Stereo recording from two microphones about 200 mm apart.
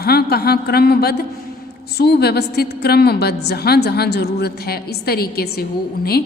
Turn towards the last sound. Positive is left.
turn(degrees=50)  # may be behind; listen again after turning